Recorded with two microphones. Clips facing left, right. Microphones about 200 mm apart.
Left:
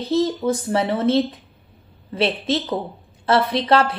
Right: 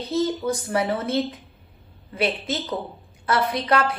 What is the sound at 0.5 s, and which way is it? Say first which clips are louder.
A woman's voice: left 3 dB; 25° left (ahead or behind).